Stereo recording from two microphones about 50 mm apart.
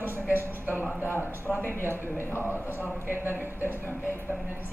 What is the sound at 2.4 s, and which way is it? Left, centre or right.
A woman's voice, right.